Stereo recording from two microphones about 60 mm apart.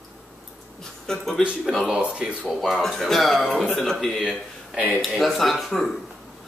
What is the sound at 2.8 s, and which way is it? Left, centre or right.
Speech, centre.